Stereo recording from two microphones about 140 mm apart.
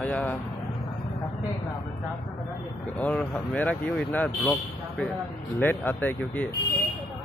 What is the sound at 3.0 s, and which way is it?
Speech, 10° left (ahead or behind).